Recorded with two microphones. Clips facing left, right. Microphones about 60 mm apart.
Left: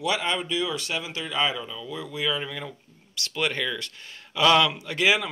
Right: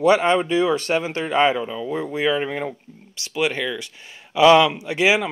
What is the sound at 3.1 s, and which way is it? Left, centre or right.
Speech, centre.